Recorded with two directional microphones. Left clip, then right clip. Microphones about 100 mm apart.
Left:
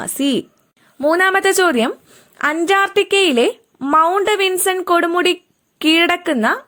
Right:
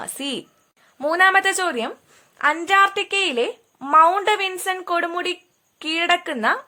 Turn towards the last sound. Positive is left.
turn(degrees=40)  # may be behind; listen again after turning